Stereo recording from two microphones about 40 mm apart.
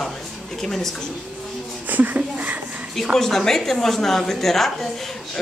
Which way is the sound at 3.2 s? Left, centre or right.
Centre.